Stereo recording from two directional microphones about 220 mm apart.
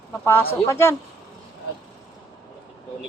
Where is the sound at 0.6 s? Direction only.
10° left (ahead or behind).